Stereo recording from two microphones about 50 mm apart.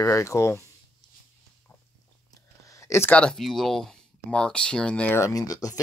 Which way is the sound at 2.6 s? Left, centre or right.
Left.